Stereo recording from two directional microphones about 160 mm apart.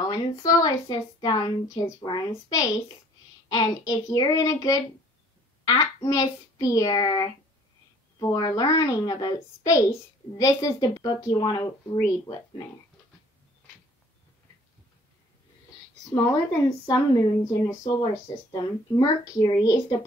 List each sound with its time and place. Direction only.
0.0 s speech: 25° left (ahead or behind)
6.0 s speech: 20° left (ahead or behind)
16.8 s speech: 20° left (ahead or behind)